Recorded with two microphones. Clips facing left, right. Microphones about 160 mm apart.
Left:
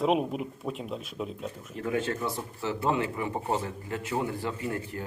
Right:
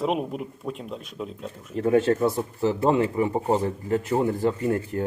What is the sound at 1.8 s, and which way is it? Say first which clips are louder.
A man's voice: right 10 dB; 35° right (ahead or behind).